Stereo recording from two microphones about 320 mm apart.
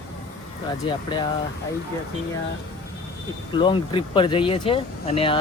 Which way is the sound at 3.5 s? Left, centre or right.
Centre.